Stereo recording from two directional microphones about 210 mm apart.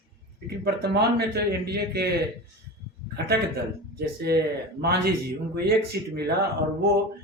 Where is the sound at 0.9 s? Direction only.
50° right (ahead or behind).